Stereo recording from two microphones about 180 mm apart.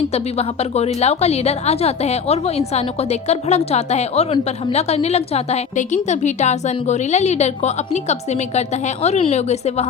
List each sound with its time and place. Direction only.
0.1 s a woman's voice: 35° left (ahead or behind)